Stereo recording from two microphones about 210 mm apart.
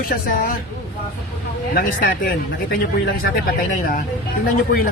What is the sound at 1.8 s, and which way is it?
Speech, 45° left (ahead or behind).